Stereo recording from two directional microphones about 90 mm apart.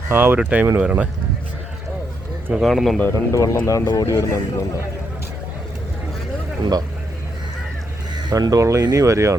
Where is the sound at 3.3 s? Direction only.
35° left (ahead or behind).